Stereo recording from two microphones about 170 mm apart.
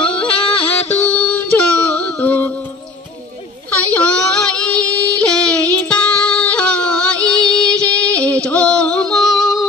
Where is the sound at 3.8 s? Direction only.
5° left (ahead or behind).